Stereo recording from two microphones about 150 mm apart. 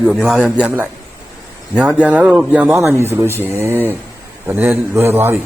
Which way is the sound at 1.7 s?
10° right (ahead or behind).